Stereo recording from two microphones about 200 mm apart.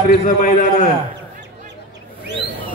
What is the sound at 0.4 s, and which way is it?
Speech, 40° left (ahead or behind).